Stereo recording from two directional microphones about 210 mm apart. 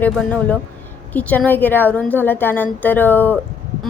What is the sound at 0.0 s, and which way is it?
A woman's voice, 5° left (ahead or behind).